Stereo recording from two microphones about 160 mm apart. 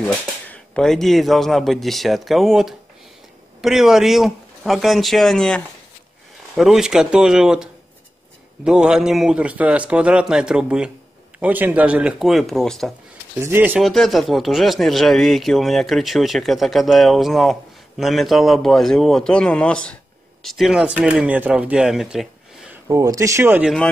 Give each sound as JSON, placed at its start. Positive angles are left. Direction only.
{"t": 0.5, "sound": "speech", "side_deg": 5}
{"t": 13.4, "sound": "speech", "side_deg": -15}
{"t": 13.8, "sound": "speech", "side_deg": 0}
{"t": 22.8, "sound": "speech", "side_deg": -20}